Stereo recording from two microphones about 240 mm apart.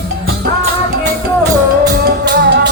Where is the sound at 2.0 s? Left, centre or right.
Right.